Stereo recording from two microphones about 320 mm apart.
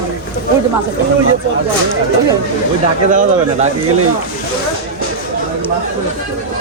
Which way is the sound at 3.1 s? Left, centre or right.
Right.